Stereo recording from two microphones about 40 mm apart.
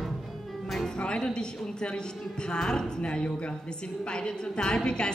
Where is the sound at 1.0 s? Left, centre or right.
Left.